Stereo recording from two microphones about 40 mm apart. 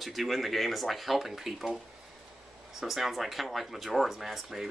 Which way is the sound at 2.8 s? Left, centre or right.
Centre.